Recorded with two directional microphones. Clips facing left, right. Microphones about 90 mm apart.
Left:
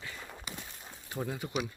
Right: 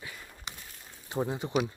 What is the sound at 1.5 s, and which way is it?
Speech, 35° right (ahead or behind).